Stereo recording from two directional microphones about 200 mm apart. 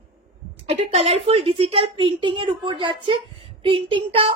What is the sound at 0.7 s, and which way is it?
A woman's voice, 30° right (ahead or behind).